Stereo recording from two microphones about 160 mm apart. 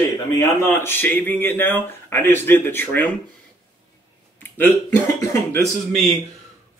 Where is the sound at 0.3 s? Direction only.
15° left (ahead or behind).